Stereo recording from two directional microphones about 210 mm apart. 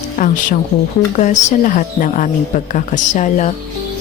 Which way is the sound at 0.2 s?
40° left (ahead or behind).